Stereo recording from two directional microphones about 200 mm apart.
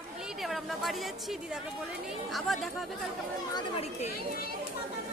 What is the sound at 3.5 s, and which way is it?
Chatter, 30° left (ahead or behind).